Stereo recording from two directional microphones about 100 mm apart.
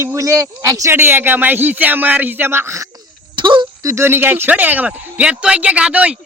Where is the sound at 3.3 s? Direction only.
50° right (ahead or behind).